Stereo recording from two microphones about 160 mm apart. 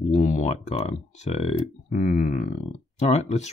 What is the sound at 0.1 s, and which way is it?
Speech, 50° left (ahead or behind).